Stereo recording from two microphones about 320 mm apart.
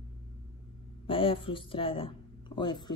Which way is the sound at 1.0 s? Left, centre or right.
Centre.